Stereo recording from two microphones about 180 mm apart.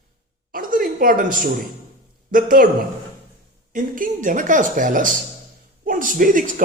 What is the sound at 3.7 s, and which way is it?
A man's voice, 50° right (ahead or behind).